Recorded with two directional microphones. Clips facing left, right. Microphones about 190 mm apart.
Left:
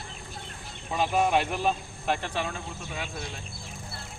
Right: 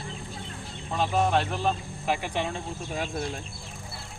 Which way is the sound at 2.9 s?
40° right (ahead or behind).